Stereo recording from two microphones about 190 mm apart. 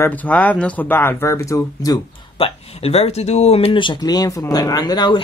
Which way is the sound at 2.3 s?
30° left (ahead or behind).